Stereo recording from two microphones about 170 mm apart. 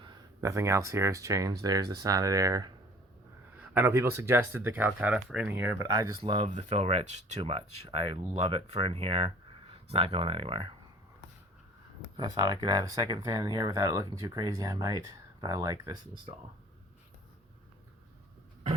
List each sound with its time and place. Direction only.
0.0 s speech: 20° right (ahead or behind)
3.8 s speech: 15° right (ahead or behind)
5.9 s speech: 25° right (ahead or behind)
12.1 s speech: 25° right (ahead or behind)